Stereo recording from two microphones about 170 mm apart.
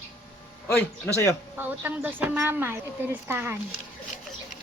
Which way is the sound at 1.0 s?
15° left (ahead or behind).